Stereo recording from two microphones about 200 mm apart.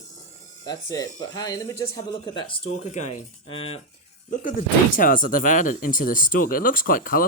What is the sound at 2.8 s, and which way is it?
Speech, 35° left (ahead or behind).